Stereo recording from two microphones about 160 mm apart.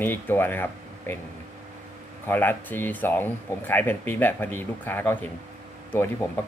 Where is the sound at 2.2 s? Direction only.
15° left (ahead or behind).